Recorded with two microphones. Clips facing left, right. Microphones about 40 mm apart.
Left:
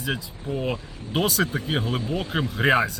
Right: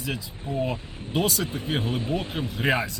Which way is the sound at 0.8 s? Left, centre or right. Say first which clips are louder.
Even; right.